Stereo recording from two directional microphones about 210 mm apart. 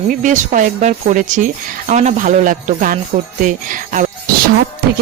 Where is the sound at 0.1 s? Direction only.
40° right (ahead or behind).